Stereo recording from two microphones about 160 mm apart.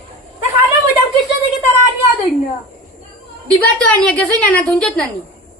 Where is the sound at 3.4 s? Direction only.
5° left (ahead or behind).